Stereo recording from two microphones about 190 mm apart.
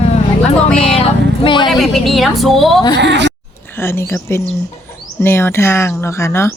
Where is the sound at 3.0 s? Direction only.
65° right (ahead or behind).